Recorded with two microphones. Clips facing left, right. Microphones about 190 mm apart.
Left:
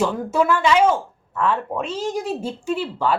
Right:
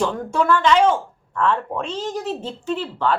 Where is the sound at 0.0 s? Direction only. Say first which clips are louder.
Left 1 dB; 5° left (ahead or behind).